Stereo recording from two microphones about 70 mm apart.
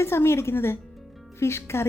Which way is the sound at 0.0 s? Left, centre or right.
Left.